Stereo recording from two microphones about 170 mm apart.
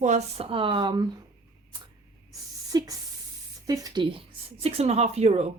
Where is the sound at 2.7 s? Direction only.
25° right (ahead or behind).